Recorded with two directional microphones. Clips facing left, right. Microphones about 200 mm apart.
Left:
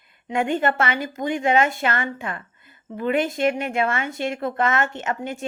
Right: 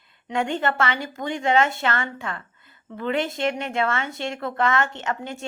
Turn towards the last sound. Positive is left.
turn(degrees=15)  # may be behind; listen again after turning